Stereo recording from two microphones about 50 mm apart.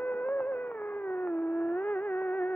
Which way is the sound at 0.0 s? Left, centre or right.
Left.